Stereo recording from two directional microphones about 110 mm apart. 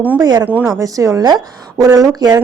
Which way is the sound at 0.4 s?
15° right (ahead or behind).